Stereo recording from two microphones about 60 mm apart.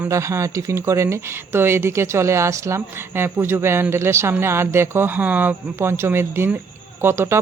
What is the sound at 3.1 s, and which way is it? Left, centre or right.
Speech, right.